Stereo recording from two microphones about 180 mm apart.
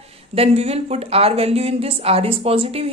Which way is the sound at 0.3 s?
35° right (ahead or behind).